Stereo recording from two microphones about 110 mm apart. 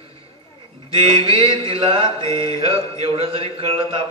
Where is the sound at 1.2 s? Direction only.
50° right (ahead or behind).